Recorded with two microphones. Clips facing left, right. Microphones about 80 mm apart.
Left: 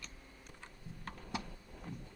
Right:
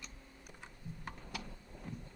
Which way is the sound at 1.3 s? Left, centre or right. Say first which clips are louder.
Left 5 dB; left.